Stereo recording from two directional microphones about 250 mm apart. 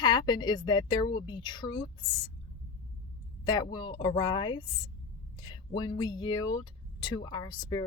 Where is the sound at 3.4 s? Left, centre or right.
Centre.